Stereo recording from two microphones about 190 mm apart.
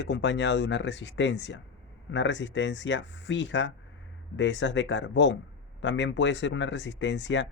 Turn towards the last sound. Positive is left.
turn(degrees=70)  # may be behind; listen again after turning